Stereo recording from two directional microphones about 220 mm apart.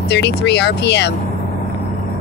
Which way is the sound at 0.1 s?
50° left (ahead or behind).